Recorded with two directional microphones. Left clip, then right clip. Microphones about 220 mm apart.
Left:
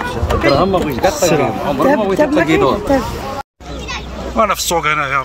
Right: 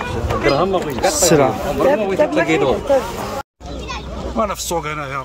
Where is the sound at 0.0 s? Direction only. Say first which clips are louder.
Left 3 dB; 45° left (ahead or behind).